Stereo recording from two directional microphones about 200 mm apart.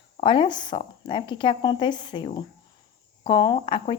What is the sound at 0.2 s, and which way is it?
Speech, 25° left (ahead or behind).